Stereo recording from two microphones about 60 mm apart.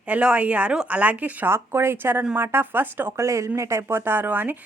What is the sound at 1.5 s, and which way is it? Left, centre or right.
Speech, right.